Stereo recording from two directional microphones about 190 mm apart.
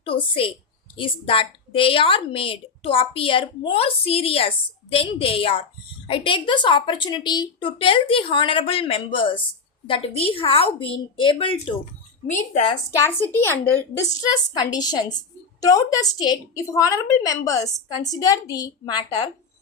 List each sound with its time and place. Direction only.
0.0 s a woman's voice: 30° left (ahead or behind)
12.3 s a woman's voice: 40° left (ahead or behind)
12.9 s a woman's voice: 15° left (ahead or behind)